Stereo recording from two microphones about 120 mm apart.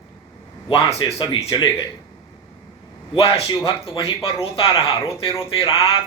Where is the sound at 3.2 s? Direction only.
50° left (ahead or behind).